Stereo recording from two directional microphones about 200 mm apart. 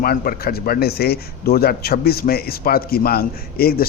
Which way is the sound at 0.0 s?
50° left (ahead or behind).